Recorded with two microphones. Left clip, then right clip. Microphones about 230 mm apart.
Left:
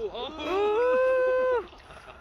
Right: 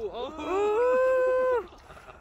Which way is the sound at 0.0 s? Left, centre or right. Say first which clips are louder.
Left 1 dB; right.